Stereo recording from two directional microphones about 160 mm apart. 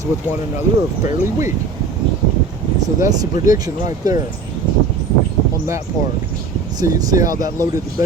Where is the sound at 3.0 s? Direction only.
25° right (ahead or behind).